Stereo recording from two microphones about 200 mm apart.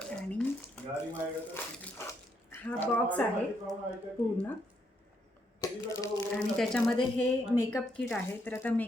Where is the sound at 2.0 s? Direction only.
15° left (ahead or behind).